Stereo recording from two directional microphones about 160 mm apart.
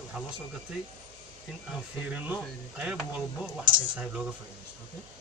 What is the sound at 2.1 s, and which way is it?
Speech, 10° right (ahead or behind).